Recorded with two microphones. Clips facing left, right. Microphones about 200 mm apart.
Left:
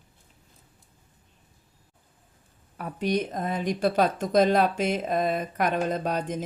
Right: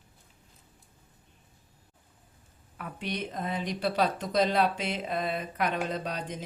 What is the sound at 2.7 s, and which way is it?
Speech, 40° left (ahead or behind).